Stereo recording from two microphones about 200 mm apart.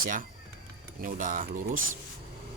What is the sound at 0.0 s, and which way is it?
Speech, 40° right (ahead or behind).